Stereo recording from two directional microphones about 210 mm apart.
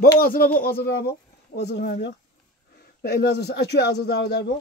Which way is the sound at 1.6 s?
50° left (ahead or behind).